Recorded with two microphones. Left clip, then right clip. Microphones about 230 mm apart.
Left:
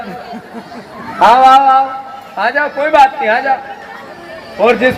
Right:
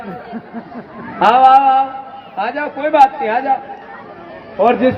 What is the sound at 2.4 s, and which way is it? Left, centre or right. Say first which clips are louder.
Speech: left 6 dB; centre.